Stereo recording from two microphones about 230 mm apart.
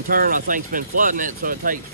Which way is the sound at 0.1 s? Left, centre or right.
Right.